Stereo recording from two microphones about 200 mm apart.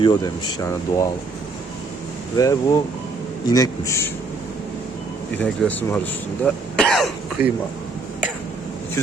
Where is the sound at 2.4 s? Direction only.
15° left (ahead or behind).